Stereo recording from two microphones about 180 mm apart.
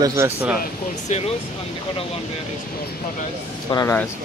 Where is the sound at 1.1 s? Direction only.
40° left (ahead or behind).